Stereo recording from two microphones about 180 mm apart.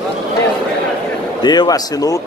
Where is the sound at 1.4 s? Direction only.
25° left (ahead or behind).